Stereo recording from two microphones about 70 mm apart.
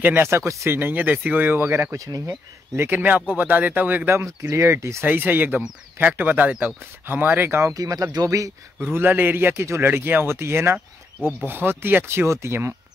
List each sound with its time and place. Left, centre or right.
0.0 s speech: right
0.3 s speech: right
0.7 s speech: right
2.0 s speech: right
2.7 s speech: right
4.1 s speech: right
5.0 s speech: right
7.6 s speech: right
8.9 s speech: right